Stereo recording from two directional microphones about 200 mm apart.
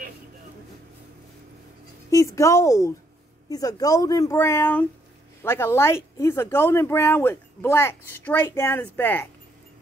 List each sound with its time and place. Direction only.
2.0 s speech: 15° left (ahead or behind)